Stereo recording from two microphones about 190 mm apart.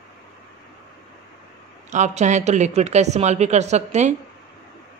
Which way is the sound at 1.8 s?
40° right (ahead or behind).